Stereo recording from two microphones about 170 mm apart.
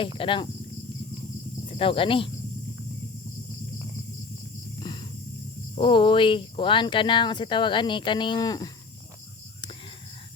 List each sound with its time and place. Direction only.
0.2 s speech: 30° left (ahead or behind)
1.8 s speech: 30° left (ahead or behind)
5.7 s speech: 30° left (ahead or behind)